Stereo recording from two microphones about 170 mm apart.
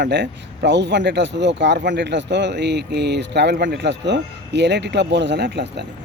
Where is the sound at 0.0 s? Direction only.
90° right.